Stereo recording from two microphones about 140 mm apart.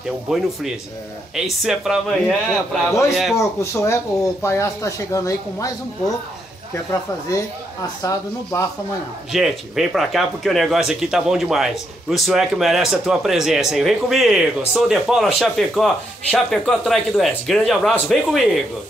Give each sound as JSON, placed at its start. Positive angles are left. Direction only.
{"t": 0.3, "sound": "speech", "side_deg": 0}
{"t": 3.3, "sound": "speech", "side_deg": 20}
{"t": 6.7, "sound": "speech", "side_deg": 20}
{"t": 9.3, "sound": "speech", "side_deg": 0}